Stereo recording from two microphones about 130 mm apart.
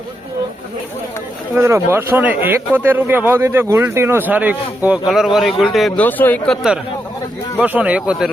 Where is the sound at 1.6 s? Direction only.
20° right (ahead or behind).